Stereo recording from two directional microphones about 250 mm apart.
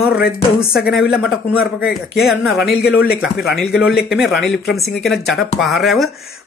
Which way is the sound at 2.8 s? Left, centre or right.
Left.